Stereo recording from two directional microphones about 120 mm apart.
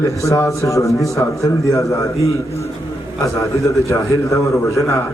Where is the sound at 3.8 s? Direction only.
25° left (ahead or behind).